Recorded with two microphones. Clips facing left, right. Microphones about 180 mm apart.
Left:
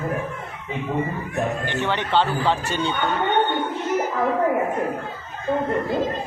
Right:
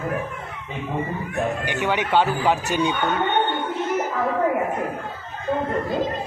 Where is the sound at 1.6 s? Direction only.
10° right (ahead or behind).